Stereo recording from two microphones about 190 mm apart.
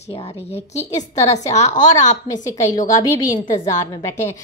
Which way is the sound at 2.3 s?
20° left (ahead or behind).